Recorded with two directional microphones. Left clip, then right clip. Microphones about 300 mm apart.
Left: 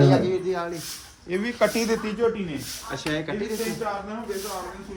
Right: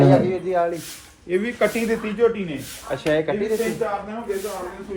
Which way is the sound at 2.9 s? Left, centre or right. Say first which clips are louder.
Right 8 dB; centre.